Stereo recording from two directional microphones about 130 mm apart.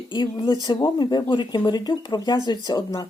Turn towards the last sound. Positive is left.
turn(degrees=30)  # may be behind; listen again after turning